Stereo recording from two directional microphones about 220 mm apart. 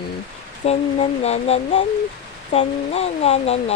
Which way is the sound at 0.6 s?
30° left (ahead or behind).